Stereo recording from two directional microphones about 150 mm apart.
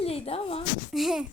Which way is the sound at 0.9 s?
Centre (ahead or behind).